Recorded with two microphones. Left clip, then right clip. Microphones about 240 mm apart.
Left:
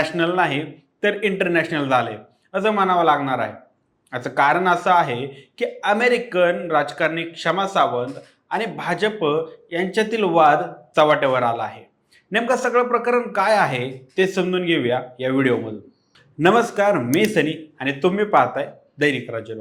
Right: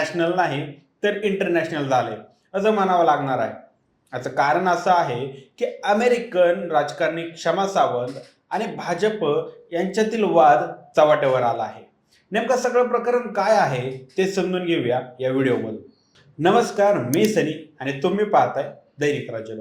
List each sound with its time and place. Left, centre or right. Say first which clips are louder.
0.0 s a man's voice: left 1 dB; left